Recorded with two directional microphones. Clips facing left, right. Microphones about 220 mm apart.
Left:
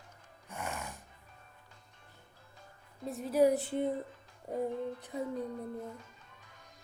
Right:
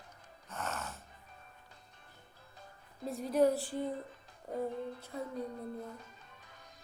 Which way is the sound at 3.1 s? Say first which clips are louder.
Left 2 dB; centre (ahead or behind).